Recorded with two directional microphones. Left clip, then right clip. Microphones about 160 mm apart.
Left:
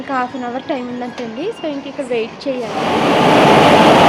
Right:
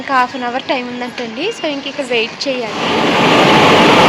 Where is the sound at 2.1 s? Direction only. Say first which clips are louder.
Right 3 dB; centre (ahead or behind).